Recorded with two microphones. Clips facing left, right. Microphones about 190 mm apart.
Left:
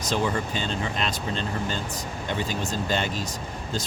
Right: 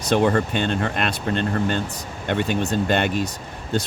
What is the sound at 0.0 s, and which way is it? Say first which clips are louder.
Speech: right 7 dB; 60° right (ahead or behind).